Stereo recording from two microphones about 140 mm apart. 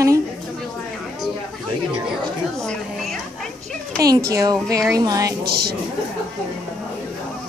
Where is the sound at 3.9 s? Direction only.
25° right (ahead or behind).